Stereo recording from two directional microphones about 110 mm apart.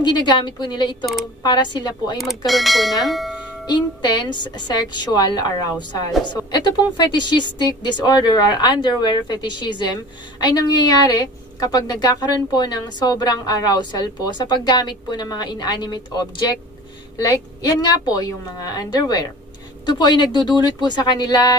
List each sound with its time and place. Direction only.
0.0 s a woman's voice: 45° left (ahead or behind)
2.1 s speech: centre (ahead or behind)
3.7 s a woman's voice: 40° left (ahead or behind)